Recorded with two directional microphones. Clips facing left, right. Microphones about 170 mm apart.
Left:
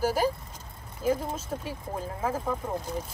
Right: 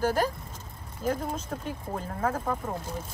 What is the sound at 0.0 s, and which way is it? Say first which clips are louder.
Speech: even; 10° left (ahead or behind).